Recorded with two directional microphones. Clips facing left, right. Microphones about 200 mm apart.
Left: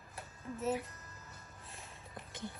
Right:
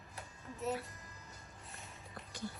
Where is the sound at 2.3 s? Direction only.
20° left (ahead or behind).